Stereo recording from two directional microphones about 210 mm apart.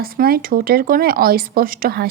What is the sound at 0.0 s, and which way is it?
Speech, 45° right (ahead or behind).